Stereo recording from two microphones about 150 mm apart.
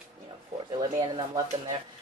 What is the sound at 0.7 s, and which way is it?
Speech, 30° right (ahead or behind).